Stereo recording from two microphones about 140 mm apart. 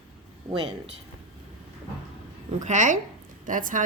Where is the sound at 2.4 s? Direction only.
60° right (ahead or behind).